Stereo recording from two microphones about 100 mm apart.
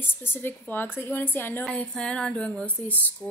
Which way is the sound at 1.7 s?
10° left (ahead or behind).